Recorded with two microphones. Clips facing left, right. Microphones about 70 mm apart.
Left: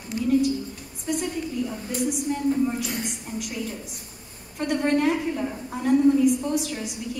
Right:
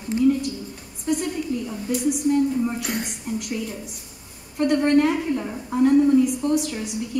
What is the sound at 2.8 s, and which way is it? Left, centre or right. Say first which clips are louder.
Speech: right 2 dB; right.